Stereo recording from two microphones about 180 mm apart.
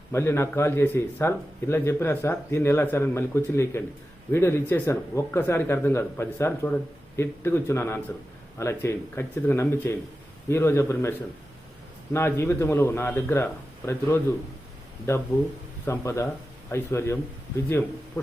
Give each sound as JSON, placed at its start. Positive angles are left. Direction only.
{"t": 0.1, "sound": "a man's voice", "side_deg": 15}
{"t": 12.1, "sound": "a man's voice", "side_deg": 15}